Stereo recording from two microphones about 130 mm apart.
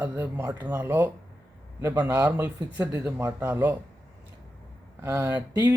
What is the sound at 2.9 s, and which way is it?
Speech, 30° right (ahead or behind).